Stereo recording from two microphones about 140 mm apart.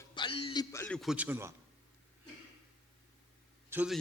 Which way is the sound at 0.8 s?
5° left (ahead or behind).